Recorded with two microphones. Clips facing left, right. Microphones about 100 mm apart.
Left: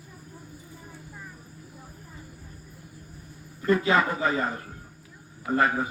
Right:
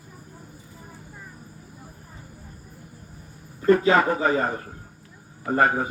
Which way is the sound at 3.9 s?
40° right (ahead or behind).